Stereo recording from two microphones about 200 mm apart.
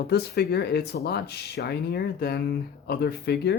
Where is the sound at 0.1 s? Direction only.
55° left (ahead or behind).